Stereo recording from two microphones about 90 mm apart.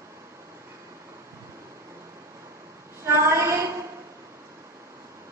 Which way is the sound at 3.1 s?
30° right (ahead or behind).